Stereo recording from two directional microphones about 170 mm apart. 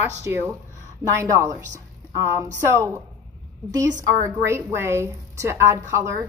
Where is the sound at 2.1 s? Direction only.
15° right (ahead or behind).